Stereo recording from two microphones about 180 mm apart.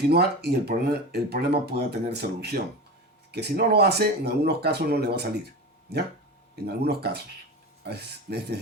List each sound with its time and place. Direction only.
0.1 s speech: 65° right (ahead or behind)
6.7 s speech: 65° right (ahead or behind)